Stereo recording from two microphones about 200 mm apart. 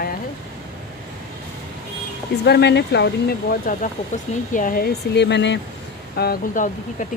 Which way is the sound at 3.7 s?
45° left (ahead or behind).